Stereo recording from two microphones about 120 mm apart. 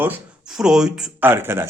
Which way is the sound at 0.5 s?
5° right (ahead or behind).